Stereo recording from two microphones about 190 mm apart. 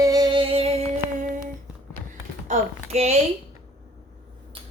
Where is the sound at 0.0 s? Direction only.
20° right (ahead or behind).